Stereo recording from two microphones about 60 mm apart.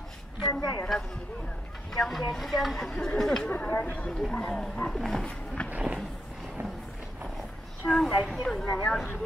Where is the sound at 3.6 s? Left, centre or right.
Left; by 5.2 s centre.